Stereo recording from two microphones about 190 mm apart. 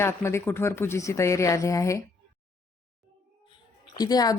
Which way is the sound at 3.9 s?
20° left (ahead or behind).